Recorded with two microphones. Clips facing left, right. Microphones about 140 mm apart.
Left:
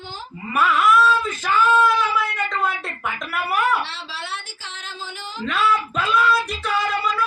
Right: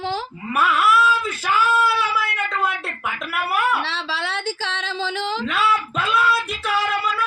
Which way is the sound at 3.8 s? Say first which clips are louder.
Right 4 dB; 90° right.